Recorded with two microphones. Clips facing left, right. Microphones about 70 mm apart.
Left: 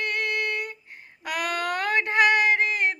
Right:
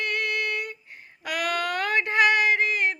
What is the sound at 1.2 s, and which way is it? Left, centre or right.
Child singing, left.